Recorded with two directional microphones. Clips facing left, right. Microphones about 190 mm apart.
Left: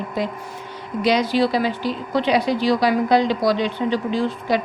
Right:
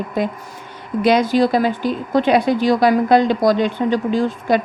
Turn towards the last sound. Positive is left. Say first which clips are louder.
# right 4 dB
turn(degrees=-50)  # may be behind; listen again after turning